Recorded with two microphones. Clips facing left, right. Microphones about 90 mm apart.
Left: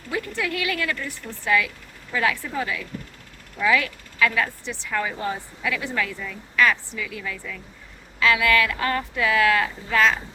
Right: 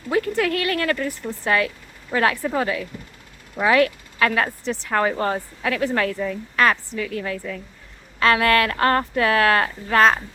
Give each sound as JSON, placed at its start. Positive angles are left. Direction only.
{"t": 0.1, "sound": "a woman's voice", "side_deg": -45}
{"t": 3.6, "sound": "speech", "side_deg": -50}
{"t": 4.4, "sound": "a woman's voice", "side_deg": -40}